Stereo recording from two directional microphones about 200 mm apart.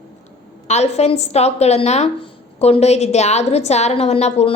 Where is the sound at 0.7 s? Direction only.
35° left (ahead or behind).